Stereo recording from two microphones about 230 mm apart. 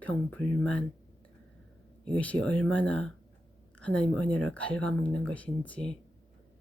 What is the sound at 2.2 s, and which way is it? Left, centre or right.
Speech, centre.